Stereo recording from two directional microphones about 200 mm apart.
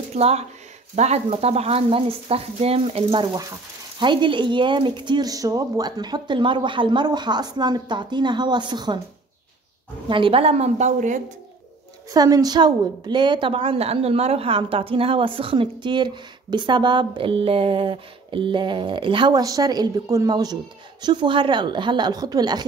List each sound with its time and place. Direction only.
0.1 s a woman's voice: 30° right (ahead or behind)
10.0 s a woman's voice: 25° right (ahead or behind)
12.1 s a woman's voice: 20° right (ahead or behind)